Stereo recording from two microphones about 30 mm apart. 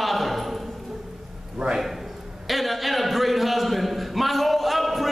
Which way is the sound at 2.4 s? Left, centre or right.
Centre.